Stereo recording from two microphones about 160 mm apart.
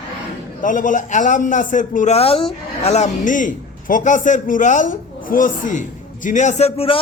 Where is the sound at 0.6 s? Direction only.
55° left (ahead or behind).